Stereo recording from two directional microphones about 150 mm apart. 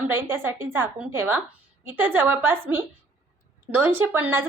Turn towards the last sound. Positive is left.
turn(degrees=-15)  # may be behind; listen again after turning